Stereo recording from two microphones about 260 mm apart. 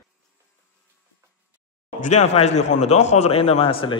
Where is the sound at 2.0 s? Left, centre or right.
Left.